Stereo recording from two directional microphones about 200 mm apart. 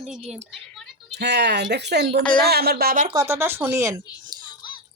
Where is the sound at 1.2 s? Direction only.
60° right (ahead or behind).